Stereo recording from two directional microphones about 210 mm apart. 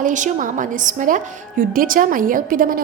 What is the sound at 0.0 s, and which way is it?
A woman's voice, 35° right (ahead or behind).